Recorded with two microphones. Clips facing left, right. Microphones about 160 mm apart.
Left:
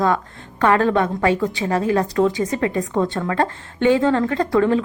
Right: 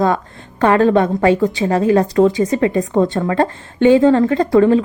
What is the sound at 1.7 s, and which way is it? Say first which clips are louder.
A woman's voice: right 5 dB; 30° right (ahead or behind).